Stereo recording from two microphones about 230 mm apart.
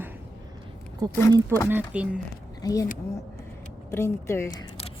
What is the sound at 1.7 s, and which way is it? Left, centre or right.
Speech, centre.